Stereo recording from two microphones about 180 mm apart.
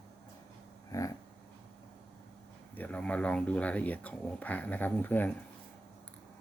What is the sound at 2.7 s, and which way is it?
Speech, 10° left (ahead or behind).